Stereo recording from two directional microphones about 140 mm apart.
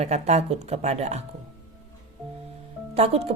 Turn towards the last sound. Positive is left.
turn(degrees=-45)  # may be behind; listen again after turning